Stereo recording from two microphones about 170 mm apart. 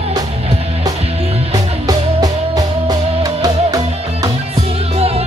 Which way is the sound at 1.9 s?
20° right (ahead or behind).